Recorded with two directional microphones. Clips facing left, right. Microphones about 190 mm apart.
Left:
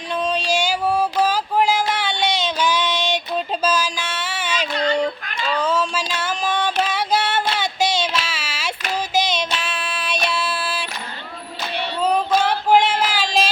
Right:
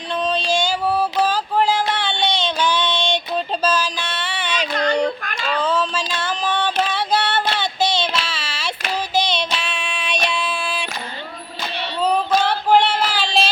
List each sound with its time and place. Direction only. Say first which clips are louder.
0.1 s music: right 1 dB; 10° left (ahead or behind)
4.7 s child singing: right 1 dB; 45° right (ahead or behind)
5.5 s a sound: right 1 dB; 10° left (ahead or behind)
9.1 s child singing: even; 5° left (ahead or behind)
10.2 s female singing: left 1 dB; 5° left (ahead or behind)
12.0 s female singing: even; 10° left (ahead or behind)
12.9 s child singing: even; 10° left (ahead or behind)